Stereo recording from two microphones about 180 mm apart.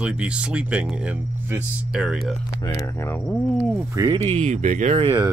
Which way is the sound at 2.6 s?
15° left (ahead or behind).